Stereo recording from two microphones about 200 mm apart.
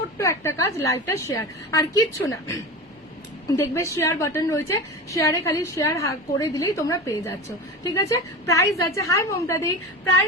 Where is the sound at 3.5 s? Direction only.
15° left (ahead or behind).